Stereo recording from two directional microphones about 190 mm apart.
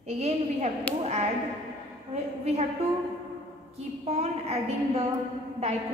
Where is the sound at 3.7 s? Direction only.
35° right (ahead or behind).